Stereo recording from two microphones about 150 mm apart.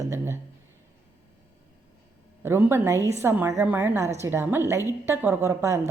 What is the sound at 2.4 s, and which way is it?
A woman's voice, 15° right (ahead or behind).